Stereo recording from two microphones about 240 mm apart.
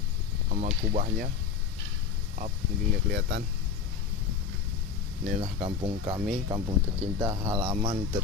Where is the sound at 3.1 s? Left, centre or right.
Right.